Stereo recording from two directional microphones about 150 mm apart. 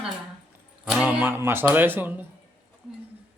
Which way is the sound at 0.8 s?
5° right (ahead or behind).